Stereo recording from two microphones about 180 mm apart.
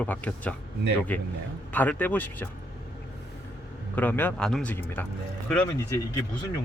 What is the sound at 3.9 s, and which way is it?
Speech, 10° left (ahead or behind).